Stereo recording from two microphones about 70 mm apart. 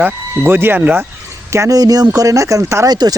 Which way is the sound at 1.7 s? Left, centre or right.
Right.